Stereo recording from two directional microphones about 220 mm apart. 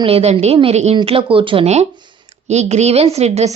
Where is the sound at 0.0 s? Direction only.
25° right (ahead or behind).